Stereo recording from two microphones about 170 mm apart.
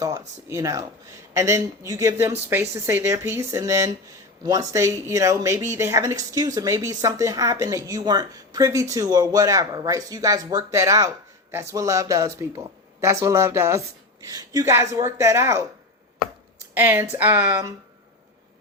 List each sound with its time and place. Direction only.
0.0 s speech: 20° right (ahead or behind)
16.7 s speech: 10° right (ahead or behind)